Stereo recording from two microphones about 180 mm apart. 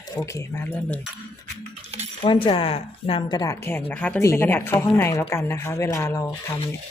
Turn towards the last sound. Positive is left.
turn(degrees=15)  # may be behind; listen again after turning